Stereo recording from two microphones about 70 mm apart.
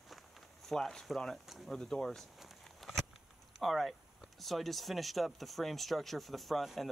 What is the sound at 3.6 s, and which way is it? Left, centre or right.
Speech, centre.